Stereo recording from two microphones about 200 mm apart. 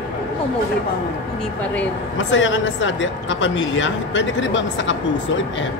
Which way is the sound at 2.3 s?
65° left (ahead or behind).